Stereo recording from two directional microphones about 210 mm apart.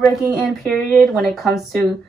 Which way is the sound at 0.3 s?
Centre (ahead or behind).